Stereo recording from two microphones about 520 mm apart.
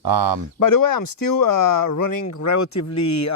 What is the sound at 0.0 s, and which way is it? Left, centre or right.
Speech, right.